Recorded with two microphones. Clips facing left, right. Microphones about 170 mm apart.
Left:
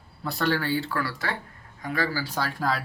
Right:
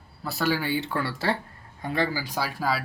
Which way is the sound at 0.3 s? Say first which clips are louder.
Even; 5° right (ahead or behind).